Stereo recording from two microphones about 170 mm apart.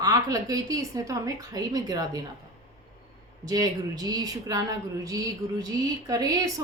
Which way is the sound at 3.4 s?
20° right (ahead or behind).